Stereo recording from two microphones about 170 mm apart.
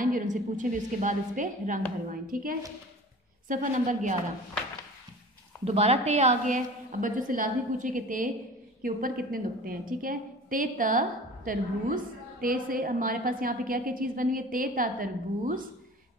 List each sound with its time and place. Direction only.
0.0 s a woman's voice: 50° right (ahead or behind)
5.7 s a woman's voice: 40° right (ahead or behind); by 15.6 s 55° right (ahead or behind)